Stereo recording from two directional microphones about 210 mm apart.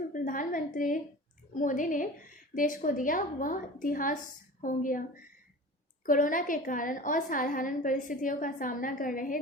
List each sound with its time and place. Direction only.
0.1 s a woman's voice: 40° left (ahead or behind)
6.1 s a woman's voice: 40° left (ahead or behind)